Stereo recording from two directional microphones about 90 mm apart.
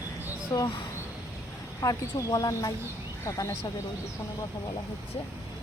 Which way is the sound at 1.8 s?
40° left (ahead or behind).